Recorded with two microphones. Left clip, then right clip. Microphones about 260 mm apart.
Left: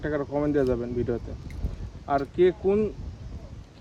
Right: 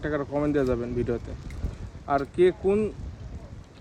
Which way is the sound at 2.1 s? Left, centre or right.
Centre.